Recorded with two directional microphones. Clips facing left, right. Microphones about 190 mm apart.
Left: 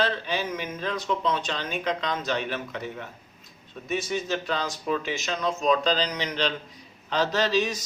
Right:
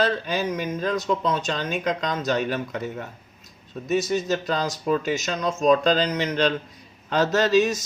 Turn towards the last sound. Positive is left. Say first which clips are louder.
# right 5 dB
turn(degrees=-50)  # may be behind; listen again after turning